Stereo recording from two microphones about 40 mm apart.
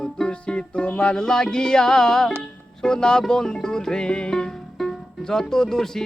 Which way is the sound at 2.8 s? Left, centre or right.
Centre.